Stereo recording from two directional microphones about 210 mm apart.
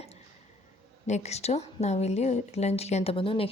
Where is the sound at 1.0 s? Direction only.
30° left (ahead or behind).